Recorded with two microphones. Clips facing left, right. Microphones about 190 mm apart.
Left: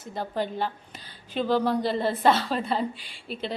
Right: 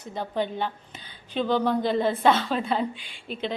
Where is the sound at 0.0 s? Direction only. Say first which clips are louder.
Right 1 dB; centre (ahead or behind).